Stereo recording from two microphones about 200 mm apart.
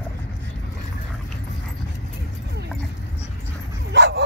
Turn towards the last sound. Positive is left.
turn(degrees=-65)  # may be behind; listen again after turning